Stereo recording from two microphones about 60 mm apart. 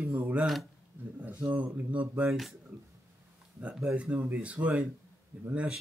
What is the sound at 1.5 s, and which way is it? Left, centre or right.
Speech, right.